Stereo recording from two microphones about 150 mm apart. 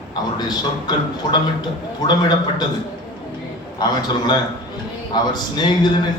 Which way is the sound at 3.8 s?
30° left (ahead or behind).